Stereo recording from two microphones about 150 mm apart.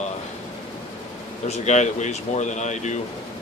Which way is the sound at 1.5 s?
50° left (ahead or behind).